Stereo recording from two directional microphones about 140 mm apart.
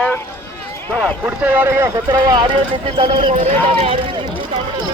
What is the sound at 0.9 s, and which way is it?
Speech, 5° right (ahead or behind).